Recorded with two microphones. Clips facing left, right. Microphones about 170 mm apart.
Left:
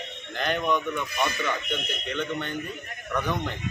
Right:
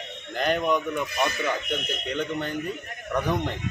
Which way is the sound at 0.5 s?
5° right (ahead or behind).